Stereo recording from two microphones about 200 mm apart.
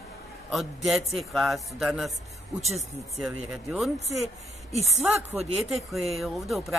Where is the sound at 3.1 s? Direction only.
Centre (ahead or behind).